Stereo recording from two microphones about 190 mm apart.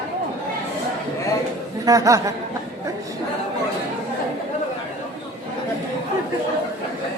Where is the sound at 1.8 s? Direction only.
20° right (ahead or behind).